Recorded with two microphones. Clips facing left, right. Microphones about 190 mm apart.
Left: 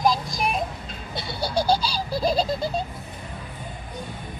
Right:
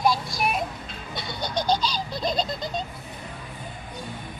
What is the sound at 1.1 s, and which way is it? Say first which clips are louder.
Baby laughter: left 4 dB; 5° left (ahead or behind).